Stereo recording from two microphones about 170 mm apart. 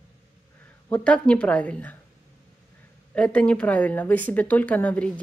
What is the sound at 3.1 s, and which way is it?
Speech, 5° left (ahead or behind).